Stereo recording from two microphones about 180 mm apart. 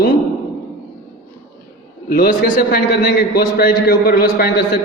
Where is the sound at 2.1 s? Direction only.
55° left (ahead or behind).